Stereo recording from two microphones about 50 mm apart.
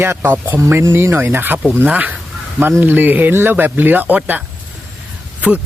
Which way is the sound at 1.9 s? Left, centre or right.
Right.